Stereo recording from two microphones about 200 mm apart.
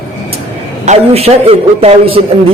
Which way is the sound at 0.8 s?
35° right (ahead or behind).